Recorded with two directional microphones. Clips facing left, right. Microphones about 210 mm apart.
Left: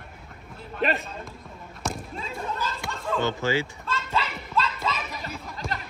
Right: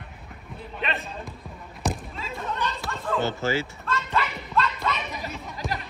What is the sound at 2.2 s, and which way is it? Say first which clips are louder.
Chatter: right 2 dB; centre (ahead or behind).